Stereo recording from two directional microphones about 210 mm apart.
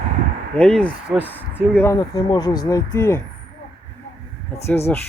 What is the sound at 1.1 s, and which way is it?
Speech, 10° right (ahead or behind).